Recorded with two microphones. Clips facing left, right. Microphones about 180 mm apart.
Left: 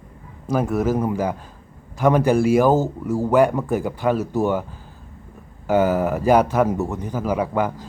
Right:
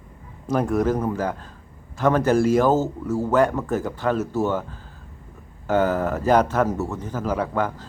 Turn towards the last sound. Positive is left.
turn(degrees=10)  # may be behind; listen again after turning